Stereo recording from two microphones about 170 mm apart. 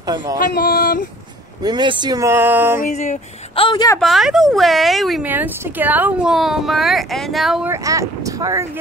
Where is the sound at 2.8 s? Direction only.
45° left (ahead or behind); by 4.0 s 25° left (ahead or behind).